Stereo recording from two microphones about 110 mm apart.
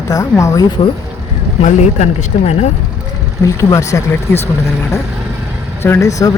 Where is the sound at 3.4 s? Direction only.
30° left (ahead or behind).